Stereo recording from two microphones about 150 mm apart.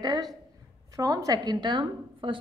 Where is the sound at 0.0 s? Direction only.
30° right (ahead or behind).